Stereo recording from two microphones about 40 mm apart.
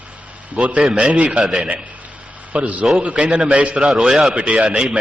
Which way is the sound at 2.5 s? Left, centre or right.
Right.